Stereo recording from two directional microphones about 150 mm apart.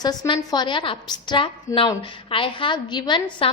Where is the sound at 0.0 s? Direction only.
25° left (ahead or behind).